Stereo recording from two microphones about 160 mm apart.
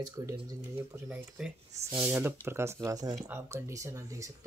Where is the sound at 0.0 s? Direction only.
25° right (ahead or behind).